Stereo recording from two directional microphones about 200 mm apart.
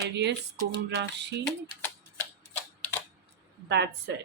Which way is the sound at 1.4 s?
10° left (ahead or behind).